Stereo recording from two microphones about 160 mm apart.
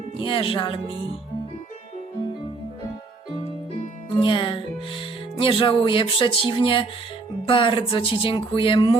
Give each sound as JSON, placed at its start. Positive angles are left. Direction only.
{"t": 0.2, "sound": "speech", "side_deg": 35}
{"t": 4.1, "sound": "speech", "side_deg": 30}